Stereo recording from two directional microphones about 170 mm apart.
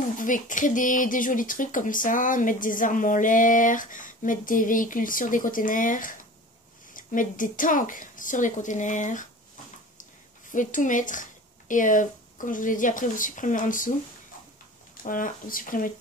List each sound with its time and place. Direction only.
0.2 s speech: 50° left (ahead or behind)
10.5 s speech: 50° left (ahead or behind)
15.0 s speech: 55° left (ahead or behind)